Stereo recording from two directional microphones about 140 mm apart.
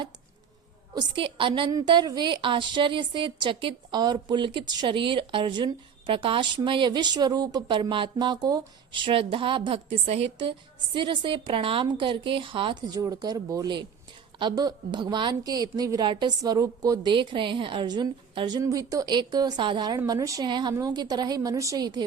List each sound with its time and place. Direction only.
0.9 s a woman's voice: 35° right (ahead or behind)